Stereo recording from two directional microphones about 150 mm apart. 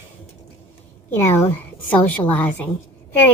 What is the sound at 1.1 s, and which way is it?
A woman's voice, 15° left (ahead or behind).